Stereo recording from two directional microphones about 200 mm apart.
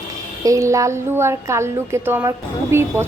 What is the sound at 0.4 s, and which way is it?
Speech, 15° right (ahead or behind).